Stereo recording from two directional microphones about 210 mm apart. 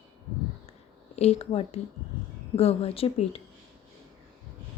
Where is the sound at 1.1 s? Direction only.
30° left (ahead or behind).